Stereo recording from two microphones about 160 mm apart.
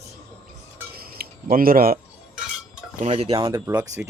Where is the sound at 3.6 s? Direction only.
20° right (ahead or behind).